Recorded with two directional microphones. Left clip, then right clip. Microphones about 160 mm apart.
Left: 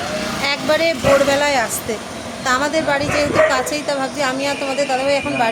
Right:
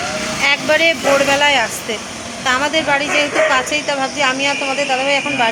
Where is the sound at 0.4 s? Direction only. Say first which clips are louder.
Right 4 dB; 5° left (ahead or behind).